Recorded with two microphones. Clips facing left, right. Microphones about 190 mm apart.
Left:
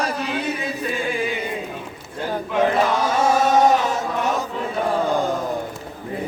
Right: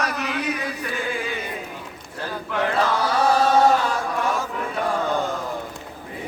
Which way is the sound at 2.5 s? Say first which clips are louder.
Left 3 dB; 20° left (ahead or behind).